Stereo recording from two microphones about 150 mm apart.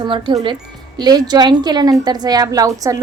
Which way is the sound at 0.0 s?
35° right (ahead or behind).